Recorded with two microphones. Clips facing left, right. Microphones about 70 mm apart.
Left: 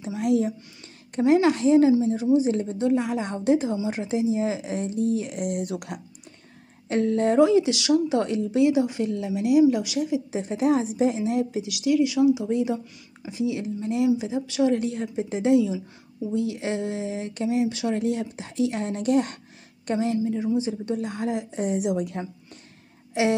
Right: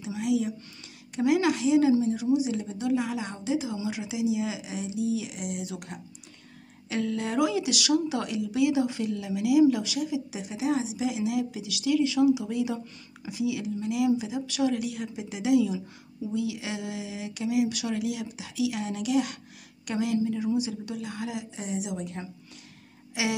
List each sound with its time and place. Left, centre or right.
0.0 s speech: left
1.9 s speech: left
3.7 s speech: left
6.9 s speech: left
20.5 s speech: left